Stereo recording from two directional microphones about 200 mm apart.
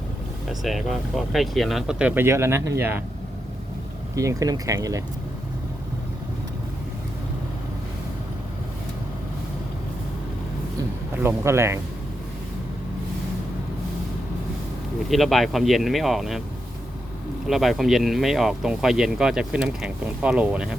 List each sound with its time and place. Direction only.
0.4 s speech: centre (ahead or behind)
4.1 s speech: 15° right (ahead or behind)
11.2 s speech: 10° right (ahead or behind)
15.1 s speech: centre (ahead or behind)
17.4 s speech: centre (ahead or behind)